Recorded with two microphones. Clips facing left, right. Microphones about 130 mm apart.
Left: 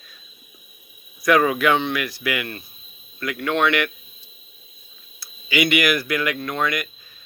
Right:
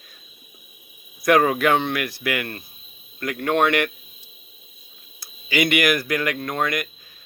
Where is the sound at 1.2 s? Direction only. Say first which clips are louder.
Even; 45° right (ahead or behind).